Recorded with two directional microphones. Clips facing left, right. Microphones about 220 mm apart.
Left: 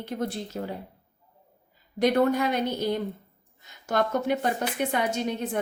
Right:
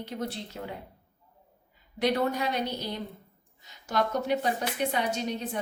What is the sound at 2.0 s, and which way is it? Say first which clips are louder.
A woman's voice: left 5 dB; 50° left (ahead or behind).